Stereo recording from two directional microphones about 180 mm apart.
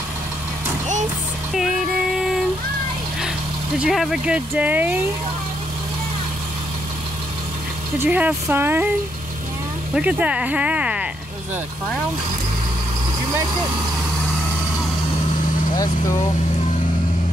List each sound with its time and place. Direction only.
1.5 s music: centre (ahead or behind)
3.7 s speech: 5° right (ahead or behind)
8.0 s speech: 10° right (ahead or behind)
9.9 s speech: 5° right (ahead or behind)
15.7 s speech: 20° left (ahead or behind)